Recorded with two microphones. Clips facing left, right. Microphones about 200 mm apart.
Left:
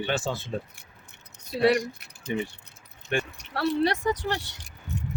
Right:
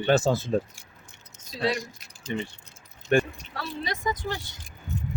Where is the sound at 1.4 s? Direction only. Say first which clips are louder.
Left 6 dB; 65° left (ahead or behind).